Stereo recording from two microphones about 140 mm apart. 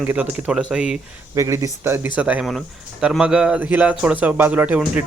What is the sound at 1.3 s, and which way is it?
Speech, 20° right (ahead or behind).